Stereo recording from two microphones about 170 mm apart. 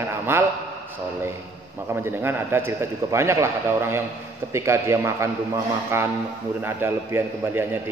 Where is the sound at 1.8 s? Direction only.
15° right (ahead or behind).